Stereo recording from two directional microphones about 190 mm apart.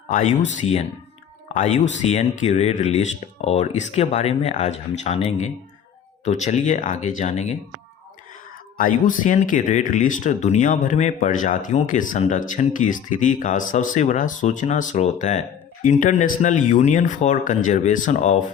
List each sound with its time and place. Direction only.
0.1 s speech: 35° left (ahead or behind)
8.8 s speech: 45° left (ahead or behind)